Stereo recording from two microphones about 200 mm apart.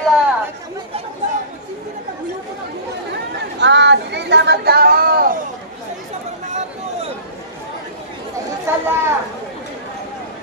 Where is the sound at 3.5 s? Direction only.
60° right (ahead or behind); by 5.4 s 45° right (ahead or behind).